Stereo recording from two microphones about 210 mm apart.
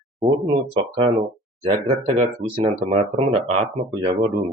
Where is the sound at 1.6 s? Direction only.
25° right (ahead or behind).